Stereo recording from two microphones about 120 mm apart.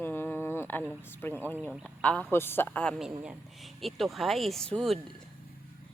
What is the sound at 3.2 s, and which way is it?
Speech, 5° right (ahead or behind).